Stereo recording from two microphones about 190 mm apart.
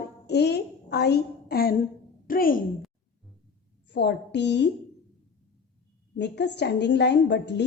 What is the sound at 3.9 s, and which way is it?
Speech, 65° left (ahead or behind).